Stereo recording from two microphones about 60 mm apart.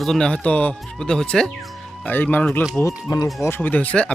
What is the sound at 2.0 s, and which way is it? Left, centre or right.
Speech, left.